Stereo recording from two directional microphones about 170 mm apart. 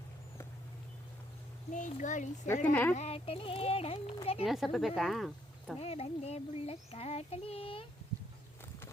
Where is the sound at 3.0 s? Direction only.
35° left (ahead or behind).